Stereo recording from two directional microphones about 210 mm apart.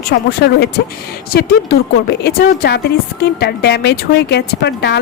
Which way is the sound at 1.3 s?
50° left (ahead or behind).